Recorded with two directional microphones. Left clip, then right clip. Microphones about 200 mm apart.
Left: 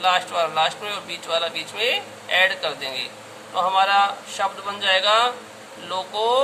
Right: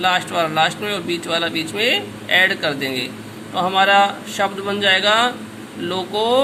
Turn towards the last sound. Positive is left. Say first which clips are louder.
# right 3 dB
turn(degrees=-15)  # may be behind; listen again after turning